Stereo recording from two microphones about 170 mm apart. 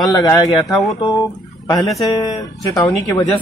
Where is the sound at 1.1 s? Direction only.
20° left (ahead or behind).